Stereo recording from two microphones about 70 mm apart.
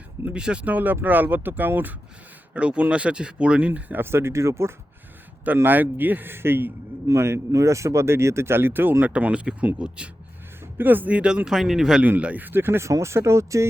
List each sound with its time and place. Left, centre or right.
0.3 s speech: centre
2.5 s speech: centre; by 4.7 s right
5.6 s speech: right
9.1 s speech: centre
10.8 s speech: right; by 12.0 s centre
12.0 s speech: right